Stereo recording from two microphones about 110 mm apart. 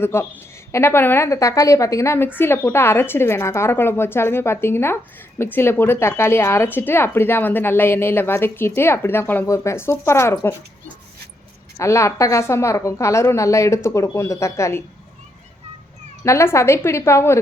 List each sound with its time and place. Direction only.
0.0 s a woman's voice: 20° left (ahead or behind)
11.8 s a woman's voice: 25° left (ahead or behind)
16.2 s a woman's voice: 25° left (ahead or behind)